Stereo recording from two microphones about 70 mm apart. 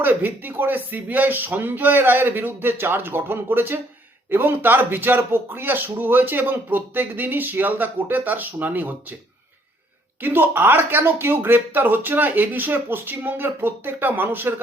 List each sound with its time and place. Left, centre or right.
0.0 s a man's voice: right
10.2 s a man's voice: right